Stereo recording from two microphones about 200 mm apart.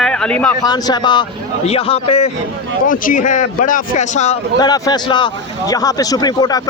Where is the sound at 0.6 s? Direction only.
20° left (ahead or behind).